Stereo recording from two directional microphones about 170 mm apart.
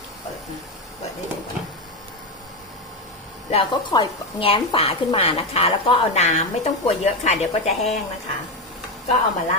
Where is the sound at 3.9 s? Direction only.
30° left (ahead or behind).